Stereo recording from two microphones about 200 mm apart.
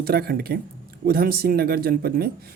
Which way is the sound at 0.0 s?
50° right (ahead or behind).